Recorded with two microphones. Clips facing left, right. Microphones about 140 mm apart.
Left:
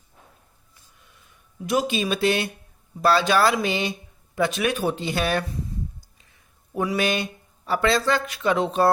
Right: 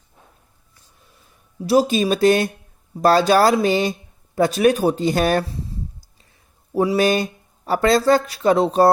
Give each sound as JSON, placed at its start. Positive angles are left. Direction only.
{"t": 0.9, "sound": "a sound", "side_deg": -35}
{"t": 3.0, "sound": "speech", "side_deg": -40}
{"t": 6.7, "sound": "speech", "side_deg": -35}